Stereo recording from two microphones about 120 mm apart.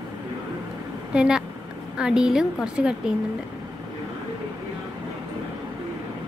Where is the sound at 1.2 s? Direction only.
5° right (ahead or behind).